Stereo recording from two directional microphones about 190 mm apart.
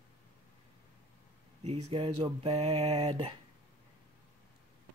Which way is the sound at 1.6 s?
35° right (ahead or behind).